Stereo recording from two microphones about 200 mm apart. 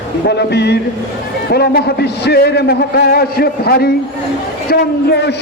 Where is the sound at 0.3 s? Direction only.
55° left (ahead or behind).